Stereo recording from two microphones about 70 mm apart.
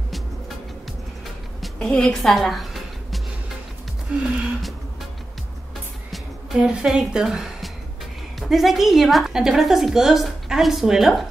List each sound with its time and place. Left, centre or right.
1.6 s music: centre
4.1 s a woman's voice: centre
6.5 s a woman's voice: centre